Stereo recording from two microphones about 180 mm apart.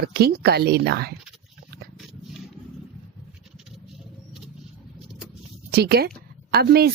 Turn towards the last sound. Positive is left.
turn(degrees=-60)  # may be behind; listen again after turning